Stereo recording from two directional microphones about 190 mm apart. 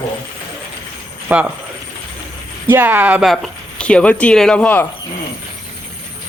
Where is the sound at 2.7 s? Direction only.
10° right (ahead or behind); by 4.8 s 5° left (ahead or behind).